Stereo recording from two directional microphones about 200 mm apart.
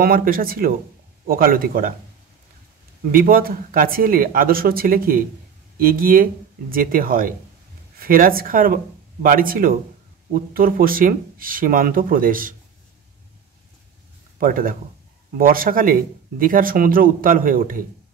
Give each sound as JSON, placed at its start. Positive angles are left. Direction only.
{"t": 0.0, "sound": "speech", "side_deg": -45}
{"t": 3.1, "sound": "speech", "side_deg": -45}
{"t": 14.4, "sound": "speech", "side_deg": -45}